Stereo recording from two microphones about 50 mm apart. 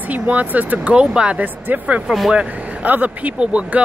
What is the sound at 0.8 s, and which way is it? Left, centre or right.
Speech, right.